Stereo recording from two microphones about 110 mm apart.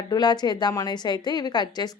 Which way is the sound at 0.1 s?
40° left (ahead or behind).